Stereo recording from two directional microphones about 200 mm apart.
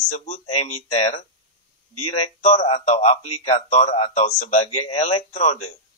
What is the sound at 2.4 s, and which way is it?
Speech, 35° left (ahead or behind).